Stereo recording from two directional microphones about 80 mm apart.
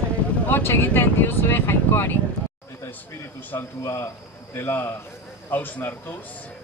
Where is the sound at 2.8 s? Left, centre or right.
Left.